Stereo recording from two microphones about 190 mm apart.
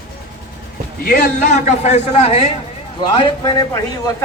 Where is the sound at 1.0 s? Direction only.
50° left (ahead or behind).